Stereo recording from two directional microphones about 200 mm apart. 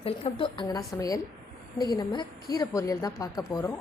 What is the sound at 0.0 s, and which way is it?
A woman's voice, 25° left (ahead or behind).